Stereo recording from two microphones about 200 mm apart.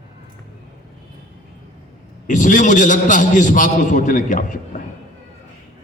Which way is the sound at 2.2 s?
40° left (ahead or behind).